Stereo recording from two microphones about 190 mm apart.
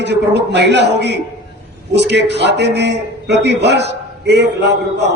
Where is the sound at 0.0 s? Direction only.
65° right (ahead or behind).